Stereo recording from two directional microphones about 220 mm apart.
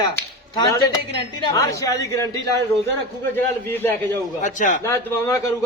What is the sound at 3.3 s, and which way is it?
Speech, 10° left (ahead or behind).